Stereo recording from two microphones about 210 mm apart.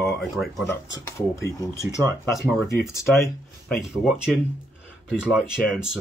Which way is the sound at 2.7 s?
10° left (ahead or behind).